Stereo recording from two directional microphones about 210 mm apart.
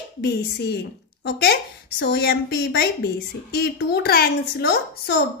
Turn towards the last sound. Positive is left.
turn(degrees=50)  # may be behind; listen again after turning